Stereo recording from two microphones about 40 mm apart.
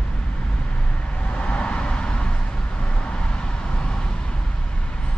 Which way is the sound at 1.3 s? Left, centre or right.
Left.